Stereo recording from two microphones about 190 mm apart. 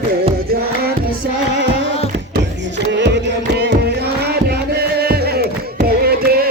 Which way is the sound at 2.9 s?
65° right (ahead or behind).